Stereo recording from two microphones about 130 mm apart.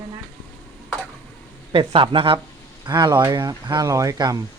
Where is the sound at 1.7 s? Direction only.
40° right (ahead or behind).